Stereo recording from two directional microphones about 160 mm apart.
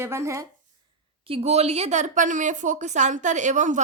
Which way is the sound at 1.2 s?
40° right (ahead or behind).